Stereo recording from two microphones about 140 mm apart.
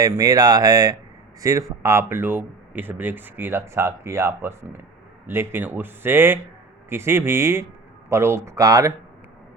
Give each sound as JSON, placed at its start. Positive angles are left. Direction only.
{"t": 0.0, "sound": "speech", "side_deg": -25}